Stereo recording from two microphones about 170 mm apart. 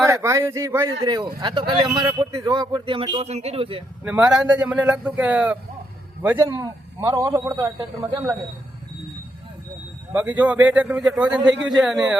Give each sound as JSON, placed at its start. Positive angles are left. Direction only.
{"t": 0.0, "sound": "speech", "side_deg": -15}
{"t": 4.0, "sound": "speech", "side_deg": -5}
{"t": 10.1, "sound": "speech", "side_deg": -10}